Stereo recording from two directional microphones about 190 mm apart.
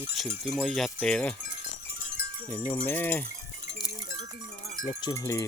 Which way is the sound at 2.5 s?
10° left (ahead or behind).